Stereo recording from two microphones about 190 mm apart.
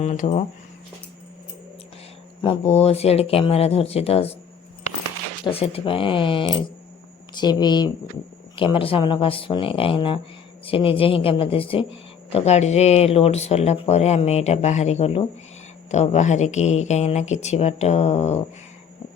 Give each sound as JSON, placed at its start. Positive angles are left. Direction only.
{"t": 0.0, "sound": "speech", "side_deg": 35}
{"t": 2.4, "sound": "speech", "side_deg": 30}
{"t": 5.5, "sound": "speech", "side_deg": 30}